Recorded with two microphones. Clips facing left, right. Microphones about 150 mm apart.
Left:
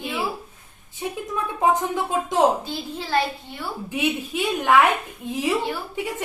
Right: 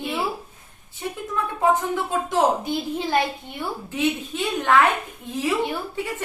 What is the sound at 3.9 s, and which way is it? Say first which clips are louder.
A woman's voice: even; 10° left (ahead or behind).